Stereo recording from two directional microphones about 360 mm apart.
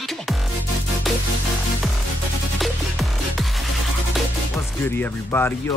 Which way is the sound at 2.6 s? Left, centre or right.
Centre.